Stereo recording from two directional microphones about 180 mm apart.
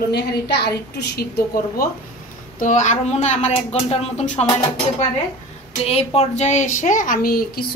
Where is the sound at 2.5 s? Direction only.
45° left (ahead or behind).